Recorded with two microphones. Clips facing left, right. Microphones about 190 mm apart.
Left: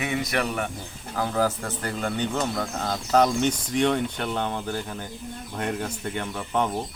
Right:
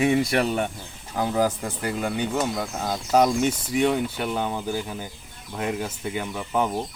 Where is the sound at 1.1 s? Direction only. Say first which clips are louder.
Right 2 dB; 15° right (ahead or behind).